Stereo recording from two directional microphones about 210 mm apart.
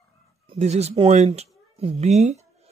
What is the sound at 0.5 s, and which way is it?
Speech, 30° right (ahead or behind).